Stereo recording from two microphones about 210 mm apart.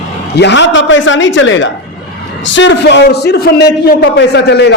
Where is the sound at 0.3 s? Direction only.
55° left (ahead or behind).